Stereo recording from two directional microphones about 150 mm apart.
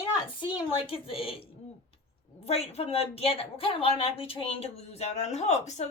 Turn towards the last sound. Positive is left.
turn(degrees=45)  # may be behind; listen again after turning